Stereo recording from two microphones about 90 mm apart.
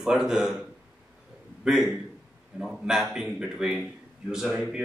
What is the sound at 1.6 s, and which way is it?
Speech, 5° right (ahead or behind).